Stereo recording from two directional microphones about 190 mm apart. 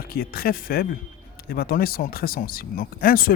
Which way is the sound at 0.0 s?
50° left (ahead or behind).